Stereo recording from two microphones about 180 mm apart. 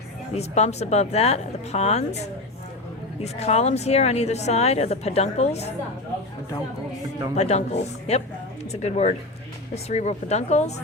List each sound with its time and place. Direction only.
0.3 s a woman's voice: 35° left (ahead or behind)
7.3 s a woman's voice: 35° left (ahead or behind)